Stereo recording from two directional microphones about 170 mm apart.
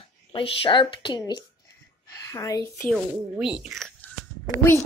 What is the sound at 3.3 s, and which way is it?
Speech, 5° right (ahead or behind).